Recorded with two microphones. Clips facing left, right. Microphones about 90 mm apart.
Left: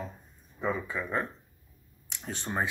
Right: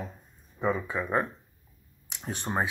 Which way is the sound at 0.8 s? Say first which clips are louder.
Right 4 dB; 20° right (ahead or behind).